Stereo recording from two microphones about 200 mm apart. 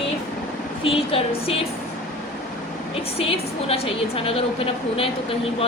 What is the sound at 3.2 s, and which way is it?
A woman's voice, 30° left (ahead or behind).